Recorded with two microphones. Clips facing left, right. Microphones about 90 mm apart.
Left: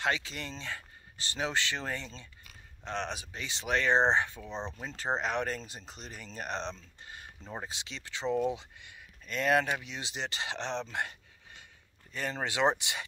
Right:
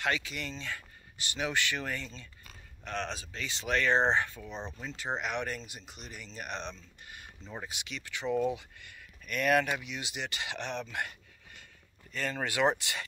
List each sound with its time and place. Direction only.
0.0 s speech: 25° left (ahead or behind)